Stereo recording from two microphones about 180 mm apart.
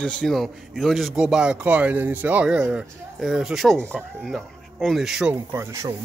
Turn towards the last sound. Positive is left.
turn(degrees=-15)  # may be behind; listen again after turning